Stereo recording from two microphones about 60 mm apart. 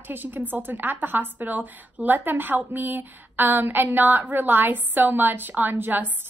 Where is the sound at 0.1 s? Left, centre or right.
Right.